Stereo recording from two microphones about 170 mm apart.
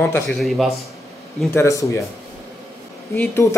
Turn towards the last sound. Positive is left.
turn(degrees=15)  # may be behind; listen again after turning